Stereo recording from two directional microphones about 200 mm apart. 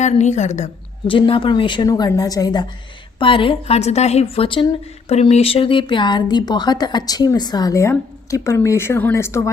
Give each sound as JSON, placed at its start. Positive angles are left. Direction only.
{"t": 0.0, "sound": "a woman's voice", "side_deg": 35}